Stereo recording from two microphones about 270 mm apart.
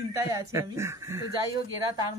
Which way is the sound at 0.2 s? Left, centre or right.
Centre.